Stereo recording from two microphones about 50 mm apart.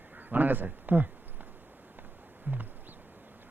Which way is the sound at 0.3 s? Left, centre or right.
Right.